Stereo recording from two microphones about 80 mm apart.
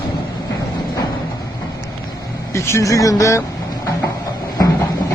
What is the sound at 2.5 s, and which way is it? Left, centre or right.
Speech, left.